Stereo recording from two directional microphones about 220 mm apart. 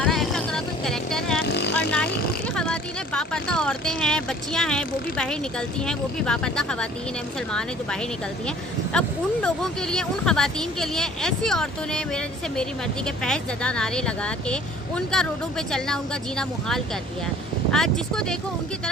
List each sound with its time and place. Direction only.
0.0 s vehicle: centre (ahead or behind)
1.5 s vehicle: 50° left (ahead or behind)
1.7 s speech: 5° left (ahead or behind)
8.4 s speech: 5° left (ahead or behind)